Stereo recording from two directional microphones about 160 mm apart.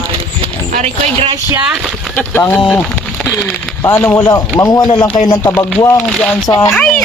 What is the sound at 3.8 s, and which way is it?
A man's voice, 15° left (ahead or behind).